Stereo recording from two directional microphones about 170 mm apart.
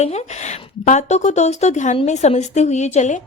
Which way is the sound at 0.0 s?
40° left (ahead or behind).